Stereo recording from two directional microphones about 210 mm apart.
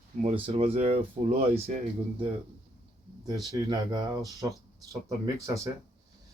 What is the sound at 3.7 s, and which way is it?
A man's voice, 20° right (ahead or behind).